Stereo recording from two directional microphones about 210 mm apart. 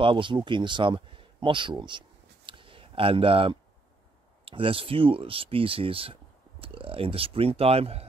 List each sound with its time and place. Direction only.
0.0 s speech: 25° right (ahead or behind)